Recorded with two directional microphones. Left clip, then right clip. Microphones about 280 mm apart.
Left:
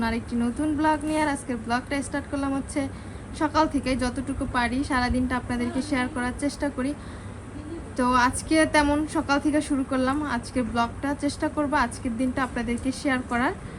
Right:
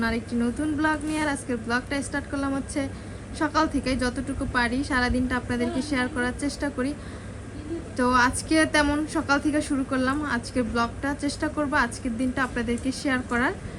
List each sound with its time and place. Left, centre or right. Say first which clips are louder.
0.0 s a woman's voice: right 1 dB; centre
7.9 s a woman's voice: even; centre